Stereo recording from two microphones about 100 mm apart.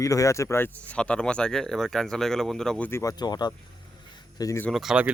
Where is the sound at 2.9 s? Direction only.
35° left (ahead or behind).